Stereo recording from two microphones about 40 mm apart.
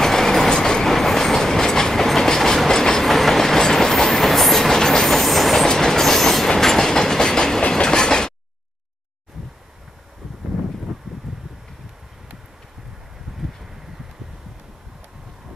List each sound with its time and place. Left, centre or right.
0.0 s train: centre
3.0 s train: centre
5.7 s train: centre
11.3 s a sound: centre